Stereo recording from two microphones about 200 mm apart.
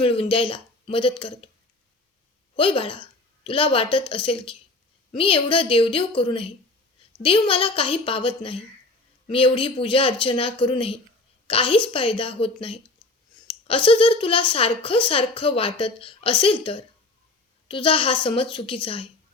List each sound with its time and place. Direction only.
0.0 s a woman's voice: 25° left (ahead or behind)
2.6 s a woman's voice: 25° left (ahead or behind)